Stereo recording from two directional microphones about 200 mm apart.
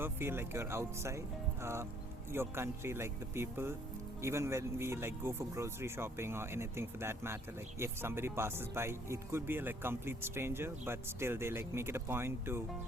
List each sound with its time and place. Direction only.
0.0 s speech: 10° right (ahead or behind)